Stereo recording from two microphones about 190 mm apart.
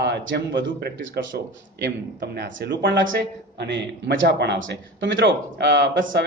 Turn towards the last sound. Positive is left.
turn(degrees=-65)  # may be behind; listen again after turning